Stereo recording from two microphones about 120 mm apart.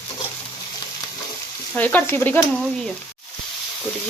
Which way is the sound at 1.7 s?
15° left (ahead or behind).